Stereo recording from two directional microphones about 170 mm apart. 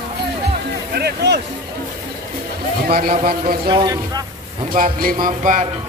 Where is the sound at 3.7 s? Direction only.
25° right (ahead or behind).